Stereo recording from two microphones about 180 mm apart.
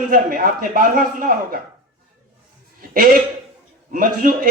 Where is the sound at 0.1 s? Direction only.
50° right (ahead or behind).